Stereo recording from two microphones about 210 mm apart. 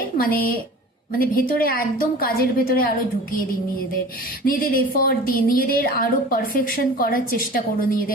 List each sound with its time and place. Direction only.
0.2 s a woman's voice: 45° left (ahead or behind)
4.4 s a woman's voice: 40° left (ahead or behind)